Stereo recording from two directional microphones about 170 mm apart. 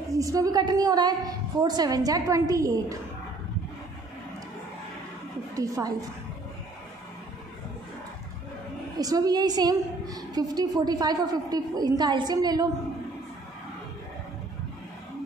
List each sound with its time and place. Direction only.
0.1 s a woman's voice: 20° right (ahead or behind)
5.6 s a woman's voice: 20° right (ahead or behind)
8.9 s a woman's voice: 20° right (ahead or behind)